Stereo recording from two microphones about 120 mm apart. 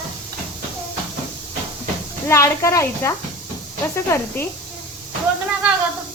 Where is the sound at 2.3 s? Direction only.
25° left (ahead or behind).